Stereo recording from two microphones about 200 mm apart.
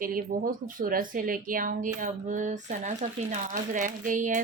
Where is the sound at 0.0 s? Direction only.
45° right (ahead or behind).